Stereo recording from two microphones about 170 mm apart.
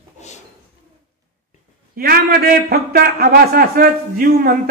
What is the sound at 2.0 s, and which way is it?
A man's voice, 65° right (ahead or behind).